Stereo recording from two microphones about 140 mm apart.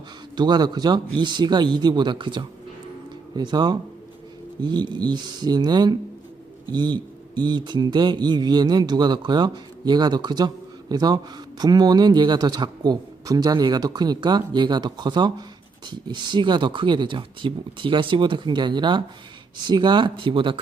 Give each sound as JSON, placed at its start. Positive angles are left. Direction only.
{"t": 0.3, "sound": "speech", "side_deg": -30}